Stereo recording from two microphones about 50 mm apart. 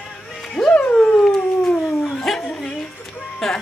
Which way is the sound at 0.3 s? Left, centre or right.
Centre.